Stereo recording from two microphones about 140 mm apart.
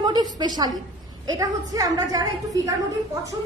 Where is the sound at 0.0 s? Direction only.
30° right (ahead or behind).